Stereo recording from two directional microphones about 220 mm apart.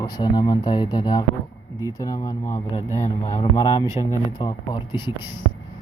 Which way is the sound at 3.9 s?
15° right (ahead or behind).